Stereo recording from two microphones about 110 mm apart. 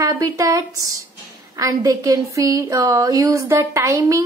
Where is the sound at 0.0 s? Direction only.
30° right (ahead or behind).